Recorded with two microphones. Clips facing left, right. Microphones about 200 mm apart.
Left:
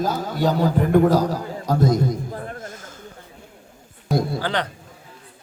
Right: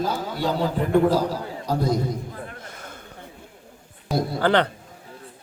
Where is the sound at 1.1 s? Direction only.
45° left (ahead or behind).